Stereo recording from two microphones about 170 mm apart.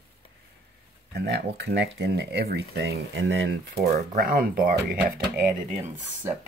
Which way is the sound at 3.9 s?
60° right (ahead or behind).